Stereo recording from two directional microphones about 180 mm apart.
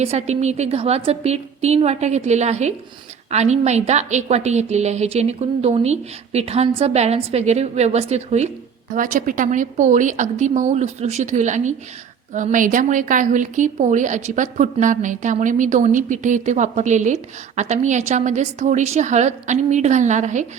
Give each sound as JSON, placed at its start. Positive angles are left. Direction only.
{"t": 0.0, "sound": "a woman's voice", "side_deg": -35}